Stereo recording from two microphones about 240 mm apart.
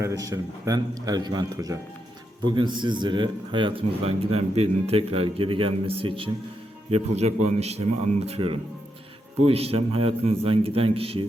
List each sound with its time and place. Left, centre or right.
0.0 s a man's voice: centre